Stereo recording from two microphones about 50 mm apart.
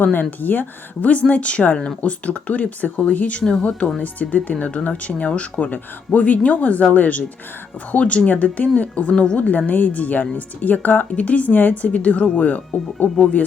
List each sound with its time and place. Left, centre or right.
0.0 s speech: left
3.4 s speech: centre
4.0 s speech: left